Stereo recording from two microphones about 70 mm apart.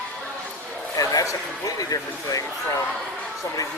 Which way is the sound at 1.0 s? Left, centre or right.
Left.